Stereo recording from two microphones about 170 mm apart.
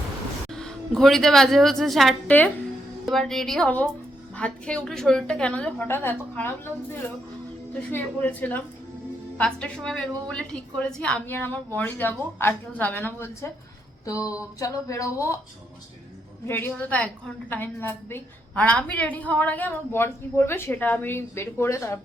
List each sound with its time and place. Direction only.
0.5 s a woman's voice: 5° left (ahead or behind)
7.7 s a woman's voice: 10° left (ahead or behind)
16.5 s a woman's voice: 10° left (ahead or behind)